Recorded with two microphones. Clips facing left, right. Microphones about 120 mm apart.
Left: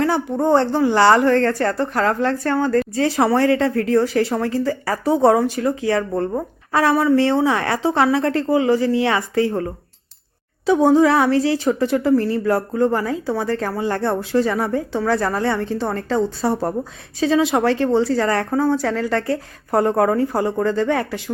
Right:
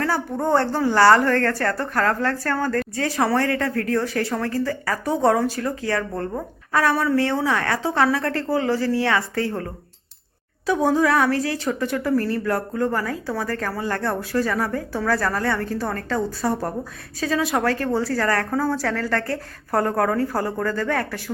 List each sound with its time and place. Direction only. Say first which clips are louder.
0.0 s a woman's voice: left 5 dB; 15° left (ahead or behind)
10.7 s speech: left 5 dB; 25° left (ahead or behind)